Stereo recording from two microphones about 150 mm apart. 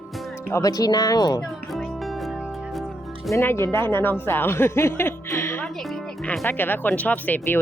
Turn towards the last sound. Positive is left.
turn(degrees=10)  # may be behind; listen again after turning